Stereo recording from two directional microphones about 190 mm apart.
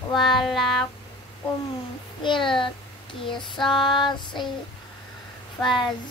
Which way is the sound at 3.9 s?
25° left (ahead or behind).